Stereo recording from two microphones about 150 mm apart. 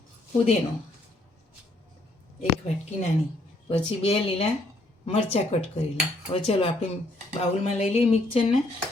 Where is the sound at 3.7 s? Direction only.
45° left (ahead or behind).